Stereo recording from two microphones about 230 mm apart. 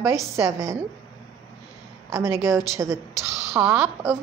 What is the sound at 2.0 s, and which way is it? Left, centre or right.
A woman's voice, centre.